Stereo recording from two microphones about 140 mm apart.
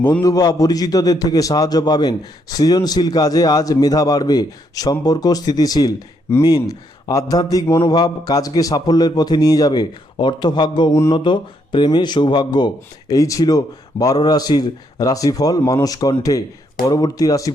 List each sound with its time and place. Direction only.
0.2 s a man's voice: 30° left (ahead or behind)
10.9 s a man's voice: 20° left (ahead or behind)
11.2 s a man's voice: 35° left (ahead or behind)